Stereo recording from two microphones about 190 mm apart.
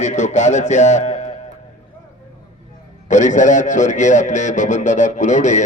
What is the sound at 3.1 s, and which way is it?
A man's voice, 40° left (ahead or behind).